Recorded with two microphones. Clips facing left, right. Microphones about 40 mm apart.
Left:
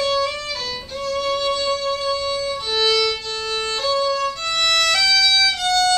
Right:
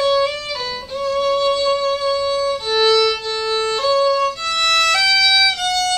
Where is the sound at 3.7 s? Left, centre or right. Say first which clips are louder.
Right 4 dB; centre.